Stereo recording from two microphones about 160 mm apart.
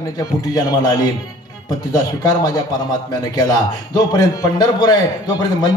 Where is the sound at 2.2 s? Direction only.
25° left (ahead or behind).